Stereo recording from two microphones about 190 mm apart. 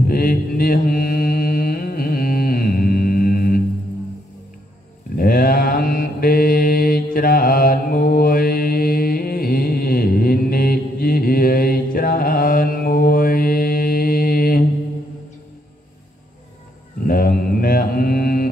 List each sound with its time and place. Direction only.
0.1 s mantra: 50° left (ahead or behind)
5.1 s mantra: 50° left (ahead or behind)
17.0 s mantra: 50° left (ahead or behind)